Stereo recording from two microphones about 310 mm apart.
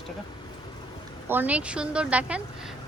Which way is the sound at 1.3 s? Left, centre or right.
Centre.